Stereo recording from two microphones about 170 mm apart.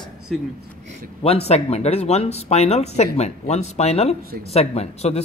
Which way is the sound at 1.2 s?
40° left (ahead or behind).